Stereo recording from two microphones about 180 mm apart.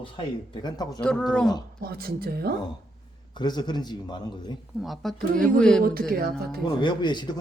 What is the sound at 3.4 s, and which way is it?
A man's voice, 25° left (ahead or behind).